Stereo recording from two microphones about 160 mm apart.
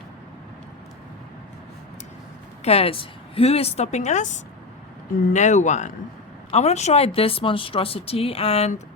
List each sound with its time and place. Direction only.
2.6 s speech: 40° left (ahead or behind)